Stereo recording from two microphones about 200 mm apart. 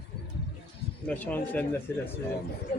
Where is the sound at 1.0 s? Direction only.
10° left (ahead or behind).